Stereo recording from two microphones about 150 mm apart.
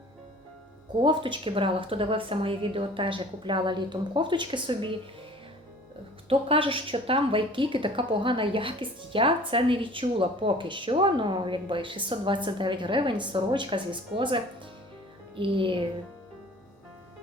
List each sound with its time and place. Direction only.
1.0 s a woman's voice: 35° right (ahead or behind)
6.2 s a woman's voice: 35° right (ahead or behind)